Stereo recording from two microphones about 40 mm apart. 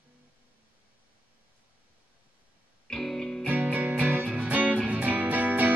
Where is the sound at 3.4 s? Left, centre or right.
Right.